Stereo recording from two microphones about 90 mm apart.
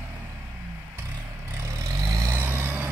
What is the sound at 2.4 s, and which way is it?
Vehicle, 20° right (ahead or behind).